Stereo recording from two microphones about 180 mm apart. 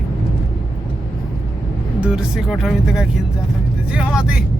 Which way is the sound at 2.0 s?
5° right (ahead or behind).